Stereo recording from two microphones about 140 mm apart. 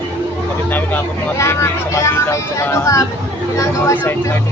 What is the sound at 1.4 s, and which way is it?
Speech, 20° left (ahead or behind).